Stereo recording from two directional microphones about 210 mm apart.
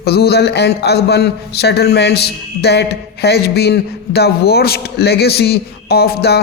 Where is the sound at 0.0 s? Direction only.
50° left (ahead or behind).